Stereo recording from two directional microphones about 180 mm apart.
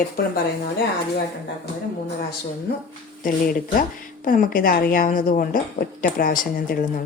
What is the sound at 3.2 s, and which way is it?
A woman's voice, 50° left (ahead or behind).